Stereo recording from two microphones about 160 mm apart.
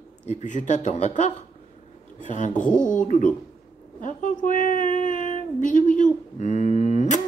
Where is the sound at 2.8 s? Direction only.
50° left (ahead or behind).